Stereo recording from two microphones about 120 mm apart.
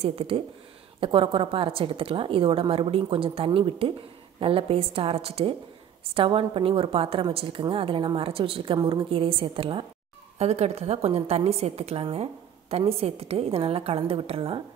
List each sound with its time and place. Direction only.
0.0 s a woman's voice: 55° right (ahead or behind)